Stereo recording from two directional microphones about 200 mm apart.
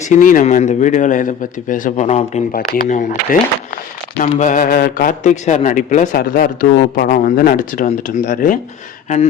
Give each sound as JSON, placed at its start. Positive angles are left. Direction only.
{"t": 0.1, "sound": "a man's voice", "side_deg": 40}
{"t": 4.2, "sound": "a man's voice", "side_deg": 40}
{"t": 6.1, "sound": "speech", "side_deg": 50}